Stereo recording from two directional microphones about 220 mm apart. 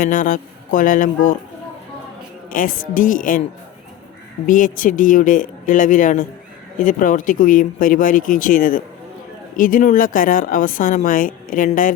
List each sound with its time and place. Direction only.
0.0 s a woman's voice: 35° left (ahead or behind)
2.5 s a woman's voice: 40° left (ahead or behind)
4.4 s a woman's voice: 35° left (ahead or behind)